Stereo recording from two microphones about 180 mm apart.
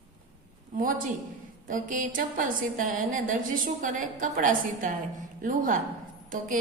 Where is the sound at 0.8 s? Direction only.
50° right (ahead or behind).